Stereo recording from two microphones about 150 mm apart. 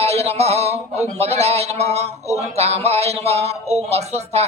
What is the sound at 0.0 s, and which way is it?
Music, 45° right (ahead or behind).